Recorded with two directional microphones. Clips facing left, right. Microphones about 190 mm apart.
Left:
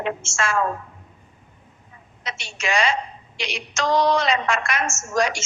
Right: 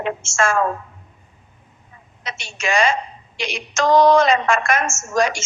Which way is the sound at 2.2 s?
50° right (ahead or behind).